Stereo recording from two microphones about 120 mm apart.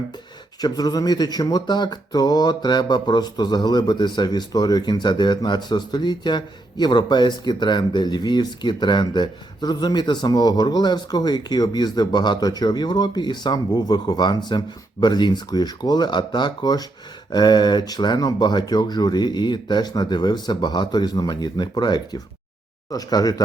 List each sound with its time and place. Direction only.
0.6 s speech: 35° left (ahead or behind)